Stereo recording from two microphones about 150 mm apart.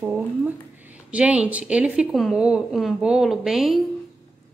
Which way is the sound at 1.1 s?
5° right (ahead or behind).